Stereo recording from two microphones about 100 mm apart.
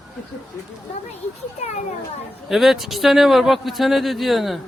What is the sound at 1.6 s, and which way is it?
Speech, 90° left.